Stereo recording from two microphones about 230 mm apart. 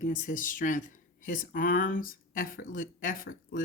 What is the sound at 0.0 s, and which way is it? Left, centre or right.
Speech, left.